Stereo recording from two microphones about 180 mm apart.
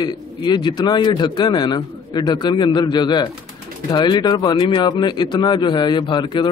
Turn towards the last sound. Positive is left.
turn(degrees=25)  # may be behind; listen again after turning